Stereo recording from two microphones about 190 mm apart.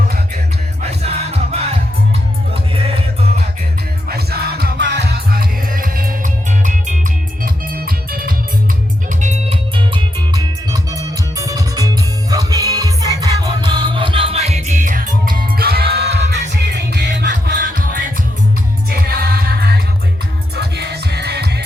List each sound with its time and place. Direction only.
0.8 s music: 35° right (ahead or behind)
4.1 s music: 55° right (ahead or behind)
9.0 s music: 40° right (ahead or behind); by 21.6 s 60° right (ahead or behind)